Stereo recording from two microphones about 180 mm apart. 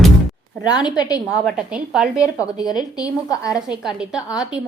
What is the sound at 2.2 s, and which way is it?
A woman's voice, 20° left (ahead or behind).